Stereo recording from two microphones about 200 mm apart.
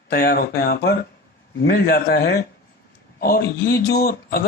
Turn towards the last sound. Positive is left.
turn(degrees=50)  # may be behind; listen again after turning